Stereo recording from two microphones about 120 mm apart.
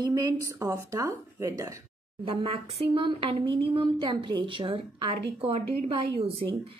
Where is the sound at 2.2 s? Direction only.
50° right (ahead or behind).